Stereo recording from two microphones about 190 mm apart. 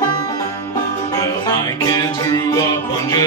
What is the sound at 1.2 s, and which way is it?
Music, 20° left (ahead or behind).